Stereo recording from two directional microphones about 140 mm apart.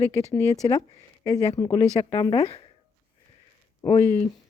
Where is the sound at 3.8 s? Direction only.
25° left (ahead or behind).